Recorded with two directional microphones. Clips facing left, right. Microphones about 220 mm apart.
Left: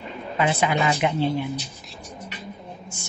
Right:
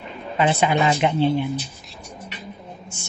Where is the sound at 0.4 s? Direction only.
25° right (ahead or behind).